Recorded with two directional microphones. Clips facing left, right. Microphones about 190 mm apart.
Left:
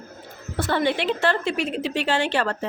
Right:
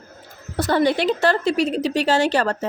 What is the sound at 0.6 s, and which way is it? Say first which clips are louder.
A woman's voice: right 4 dB; 40° right (ahead or behind).